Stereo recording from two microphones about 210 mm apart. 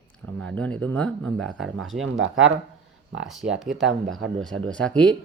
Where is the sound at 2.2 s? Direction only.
70° right (ahead or behind).